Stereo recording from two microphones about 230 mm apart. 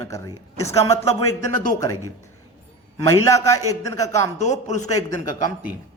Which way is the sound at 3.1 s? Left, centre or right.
Centre.